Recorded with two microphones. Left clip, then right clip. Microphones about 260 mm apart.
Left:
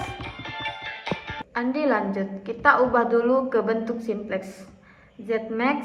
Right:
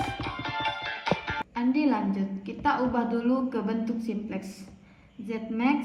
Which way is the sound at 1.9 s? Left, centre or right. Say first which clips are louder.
Left 5 dB; centre.